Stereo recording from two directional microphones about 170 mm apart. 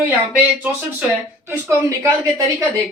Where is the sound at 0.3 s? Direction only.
10° right (ahead or behind).